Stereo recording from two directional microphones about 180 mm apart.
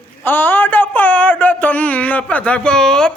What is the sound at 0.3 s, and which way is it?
Speech, 10° left (ahead or behind).